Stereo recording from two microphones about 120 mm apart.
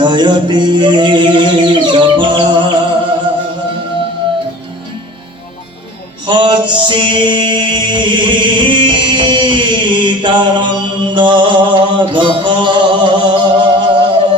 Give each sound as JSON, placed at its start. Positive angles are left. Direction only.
{"t": 0.0, "sound": "music", "side_deg": -40}
{"t": 6.2, "sound": "music", "side_deg": -40}